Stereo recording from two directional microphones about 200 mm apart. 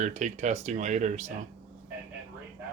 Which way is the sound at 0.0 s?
35° right (ahead or behind).